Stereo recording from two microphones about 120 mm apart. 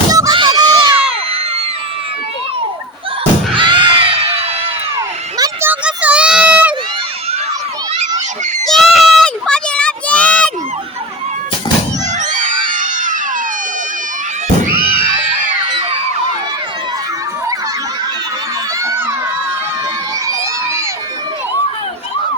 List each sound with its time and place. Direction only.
0.1 s crowd: 30° right (ahead or behind)
0.9 s a sound: 55° right (ahead or behind)
3.5 s children shouting: 40° right (ahead or behind)
5.6 s children playing: 10° right (ahead or behind)
8.6 s a sound: centre (ahead or behind)
12.3 s screaming: 90° right
18.8 s crowd: 25° right (ahead or behind)
20.2 s crowd: 25° right (ahead or behind)